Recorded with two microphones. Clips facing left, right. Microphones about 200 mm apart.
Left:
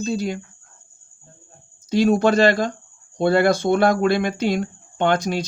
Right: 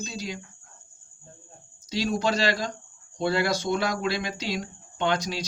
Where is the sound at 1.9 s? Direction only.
55° left (ahead or behind).